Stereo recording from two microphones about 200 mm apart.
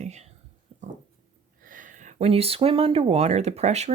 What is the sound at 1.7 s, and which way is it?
Speech, 40° right (ahead or behind).